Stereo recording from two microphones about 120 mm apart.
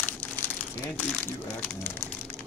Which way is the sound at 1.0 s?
15° left (ahead or behind).